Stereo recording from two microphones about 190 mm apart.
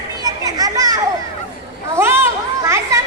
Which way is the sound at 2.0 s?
15° right (ahead or behind).